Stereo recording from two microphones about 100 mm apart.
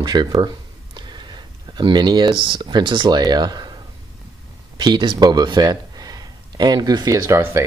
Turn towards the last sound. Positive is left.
turn(degrees=-30)  # may be behind; listen again after turning